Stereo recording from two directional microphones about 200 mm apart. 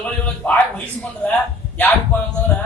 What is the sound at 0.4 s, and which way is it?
Speech, 10° left (ahead or behind).